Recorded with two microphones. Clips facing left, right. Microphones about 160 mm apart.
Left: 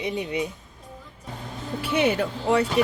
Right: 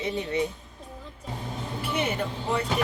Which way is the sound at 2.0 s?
80° left.